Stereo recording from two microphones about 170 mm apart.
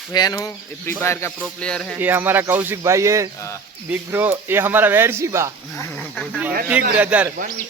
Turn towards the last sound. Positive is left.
turn(degrees=-10)  # may be behind; listen again after turning